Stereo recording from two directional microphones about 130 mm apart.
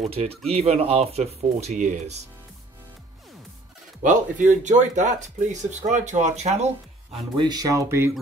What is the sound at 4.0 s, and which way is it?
Speech, 75° right (ahead or behind).